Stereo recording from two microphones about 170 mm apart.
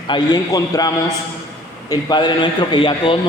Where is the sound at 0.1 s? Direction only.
25° left (ahead or behind).